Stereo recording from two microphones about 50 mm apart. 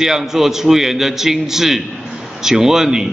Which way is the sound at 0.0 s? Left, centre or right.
Centre.